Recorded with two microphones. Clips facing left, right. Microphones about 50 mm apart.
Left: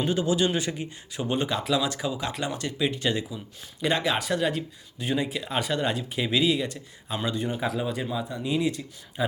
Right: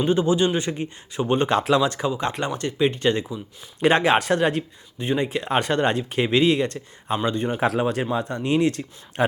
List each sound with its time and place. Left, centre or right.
0.0 s speech: right
1.5 s speech: right
3.8 s speech: right
4.9 s speech: right
7.8 s speech: right